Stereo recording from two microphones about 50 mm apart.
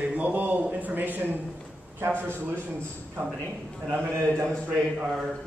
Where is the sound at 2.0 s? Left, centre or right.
Right.